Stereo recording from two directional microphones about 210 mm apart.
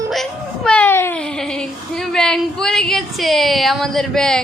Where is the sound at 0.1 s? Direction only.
Centre (ahead or behind).